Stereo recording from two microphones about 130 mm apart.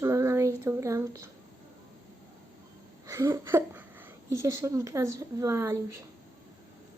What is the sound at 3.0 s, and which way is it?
A woman's voice, 25° right (ahead or behind).